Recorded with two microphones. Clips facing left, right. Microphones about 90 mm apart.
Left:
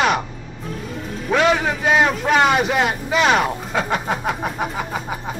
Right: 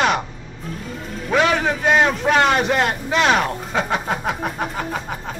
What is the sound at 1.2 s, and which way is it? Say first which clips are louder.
Speech: left 1 dB; 5° left (ahead or behind).